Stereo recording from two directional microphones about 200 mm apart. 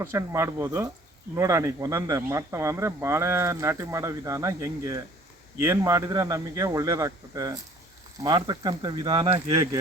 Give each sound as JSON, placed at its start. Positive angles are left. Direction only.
{"t": 0.0, "sound": "speech", "side_deg": -15}